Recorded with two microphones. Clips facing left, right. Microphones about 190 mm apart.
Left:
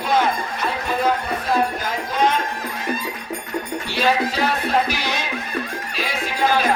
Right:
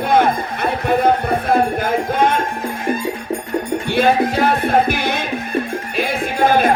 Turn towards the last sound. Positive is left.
turn(degrees=-55)  # may be behind; listen again after turning